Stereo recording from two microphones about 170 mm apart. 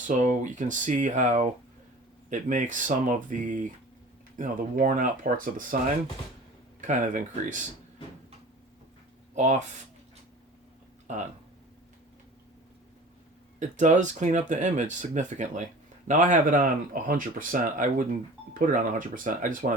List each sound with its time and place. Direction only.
0.2 s speech: 50° right (ahead or behind)
9.3 s speech: 45° right (ahead or behind)
11.1 s speech: 45° right (ahead or behind)
13.6 s speech: 45° right (ahead or behind)